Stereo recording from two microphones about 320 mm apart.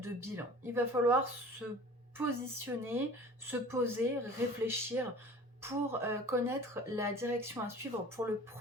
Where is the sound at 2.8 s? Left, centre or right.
Centre.